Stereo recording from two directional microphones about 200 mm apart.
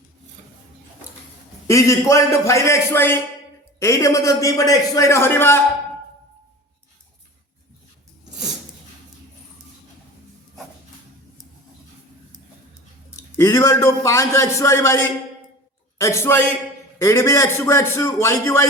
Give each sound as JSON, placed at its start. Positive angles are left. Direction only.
{"t": 1.6, "sound": "a man's voice", "side_deg": 15}
{"t": 13.1, "sound": "a man's voice", "side_deg": 15}